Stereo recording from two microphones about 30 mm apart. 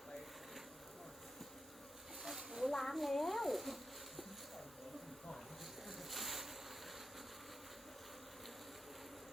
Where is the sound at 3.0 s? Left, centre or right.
Centre.